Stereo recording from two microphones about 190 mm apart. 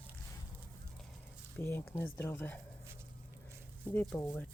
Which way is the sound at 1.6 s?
10° left (ahead or behind).